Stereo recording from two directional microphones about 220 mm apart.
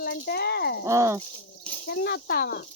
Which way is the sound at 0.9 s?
15° right (ahead or behind).